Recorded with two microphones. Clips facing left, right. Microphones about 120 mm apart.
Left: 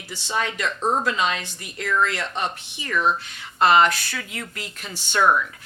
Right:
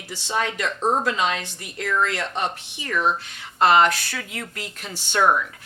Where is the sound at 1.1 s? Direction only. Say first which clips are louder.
Even; 55° right (ahead or behind).